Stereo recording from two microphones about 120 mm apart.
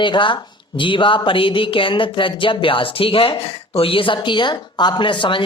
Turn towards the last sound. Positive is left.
turn(degrees=45)  # may be behind; listen again after turning